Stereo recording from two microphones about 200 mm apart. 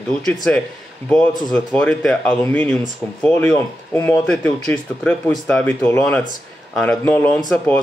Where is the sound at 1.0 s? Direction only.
5° left (ahead or behind).